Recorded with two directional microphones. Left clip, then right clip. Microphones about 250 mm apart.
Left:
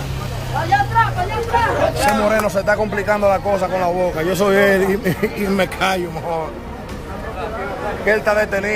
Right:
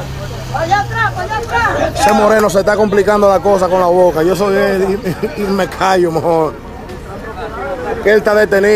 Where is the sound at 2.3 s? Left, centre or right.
Right.